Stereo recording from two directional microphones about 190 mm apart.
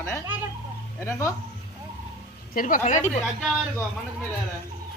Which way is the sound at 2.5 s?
45° left (ahead or behind).